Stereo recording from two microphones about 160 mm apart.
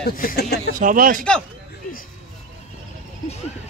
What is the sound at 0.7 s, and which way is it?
Speech, 60° right (ahead or behind).